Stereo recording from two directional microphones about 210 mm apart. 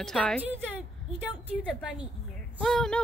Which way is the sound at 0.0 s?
Centre (ahead or behind).